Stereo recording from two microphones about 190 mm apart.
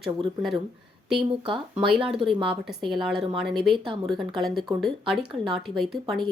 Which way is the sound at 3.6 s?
25° right (ahead or behind).